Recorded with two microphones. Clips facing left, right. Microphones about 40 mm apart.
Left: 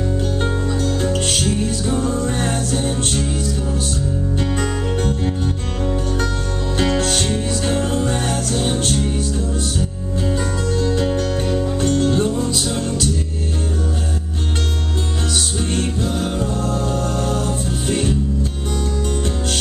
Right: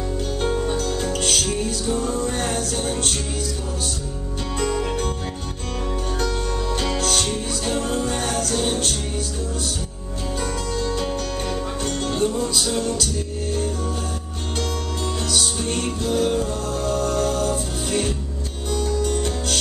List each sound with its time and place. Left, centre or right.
0.7 s music: left
4.6 s music: left
6.9 s music: left
10.9 s music: centre
12.3 s music: centre
15.3 s music: left